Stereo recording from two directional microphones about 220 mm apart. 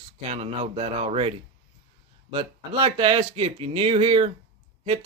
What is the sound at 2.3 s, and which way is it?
Speech, 25° right (ahead or behind).